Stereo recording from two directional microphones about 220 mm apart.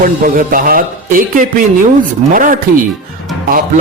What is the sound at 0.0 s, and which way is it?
Speech, 40° right (ahead or behind).